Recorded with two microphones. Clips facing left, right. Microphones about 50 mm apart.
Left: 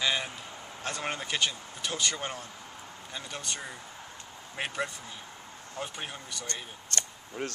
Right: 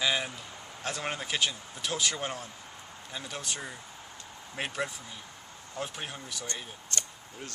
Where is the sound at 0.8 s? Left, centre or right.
Centre.